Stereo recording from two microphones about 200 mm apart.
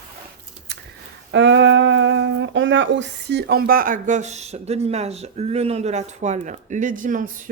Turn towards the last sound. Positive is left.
turn(degrees=-40)  # may be behind; listen again after turning